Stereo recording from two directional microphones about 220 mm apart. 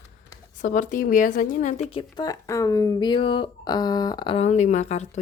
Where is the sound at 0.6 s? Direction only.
35° left (ahead or behind).